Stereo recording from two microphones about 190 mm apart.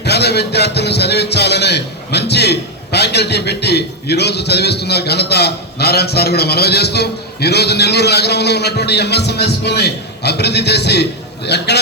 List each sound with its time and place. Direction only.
0.0 s a man's voice: 60° left (ahead or behind)